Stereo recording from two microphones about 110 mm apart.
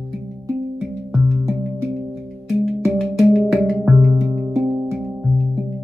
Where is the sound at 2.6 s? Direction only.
Centre (ahead or behind).